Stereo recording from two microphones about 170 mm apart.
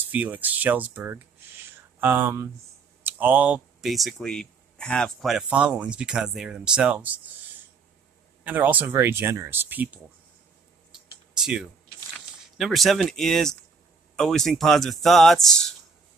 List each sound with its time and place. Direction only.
0.0 s speech: 10° right (ahead or behind)
8.5 s speech: 10° right (ahead or behind)
10.9 s a sound: 5° right (ahead or behind)
12.5 s speech: centre (ahead or behind)